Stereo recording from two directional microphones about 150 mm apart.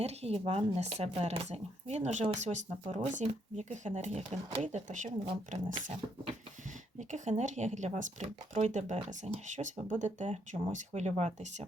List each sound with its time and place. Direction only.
0.0 s speech: 45° right (ahead or behind)
7.1 s speech: 55° right (ahead or behind)